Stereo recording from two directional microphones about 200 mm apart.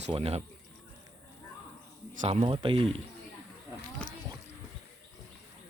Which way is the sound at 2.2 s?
30° right (ahead or behind).